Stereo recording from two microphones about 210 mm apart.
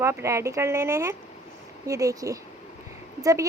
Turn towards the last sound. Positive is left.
turn(degrees=-15)  # may be behind; listen again after turning